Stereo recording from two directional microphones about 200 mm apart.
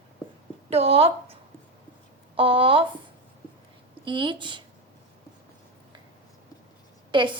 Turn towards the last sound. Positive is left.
turn(degrees=-25)  # may be behind; listen again after turning